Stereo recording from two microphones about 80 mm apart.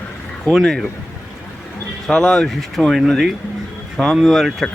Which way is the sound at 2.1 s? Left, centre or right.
Centre.